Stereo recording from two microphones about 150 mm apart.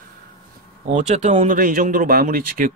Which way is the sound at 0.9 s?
50° right (ahead or behind).